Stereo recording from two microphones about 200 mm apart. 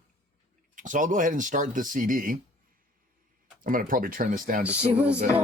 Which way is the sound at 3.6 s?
45° right (ahead or behind).